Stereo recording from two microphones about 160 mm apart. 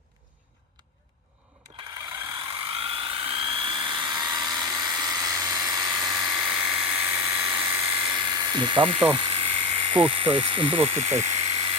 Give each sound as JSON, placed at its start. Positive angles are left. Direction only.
{"t": 2.7, "sound": "helicopter", "side_deg": -35}
{"t": 5.8, "sound": "electric toothbrush", "side_deg": -5}
{"t": 8.0, "sound": "electric toothbrush", "side_deg": -30}